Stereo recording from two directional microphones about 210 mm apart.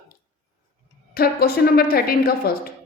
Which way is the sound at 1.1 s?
45° left (ahead or behind).